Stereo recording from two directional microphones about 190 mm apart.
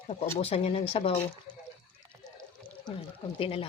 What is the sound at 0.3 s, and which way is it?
Speech, 35° left (ahead or behind).